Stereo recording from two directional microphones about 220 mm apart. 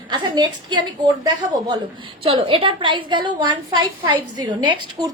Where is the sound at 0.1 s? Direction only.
20° right (ahead or behind).